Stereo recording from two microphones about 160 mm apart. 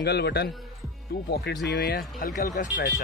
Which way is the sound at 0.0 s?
90° left.